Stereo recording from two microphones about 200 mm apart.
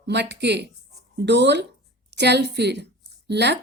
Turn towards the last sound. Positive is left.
turn(degrees=-55)  # may be behind; listen again after turning